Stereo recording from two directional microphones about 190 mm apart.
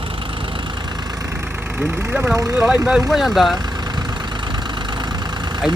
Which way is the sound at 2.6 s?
5° right (ahead or behind).